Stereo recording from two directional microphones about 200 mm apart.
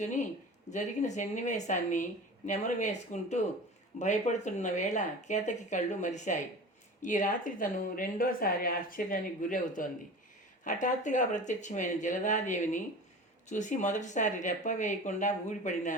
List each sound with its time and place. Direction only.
0.0 s speech: 40° left (ahead or behind)